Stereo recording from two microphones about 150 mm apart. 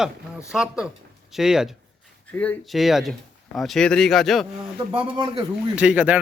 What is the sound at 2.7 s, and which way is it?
A man's voice, centre (ahead or behind).